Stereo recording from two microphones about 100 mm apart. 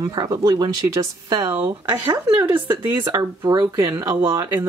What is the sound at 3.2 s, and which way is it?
Speech, 40° right (ahead or behind).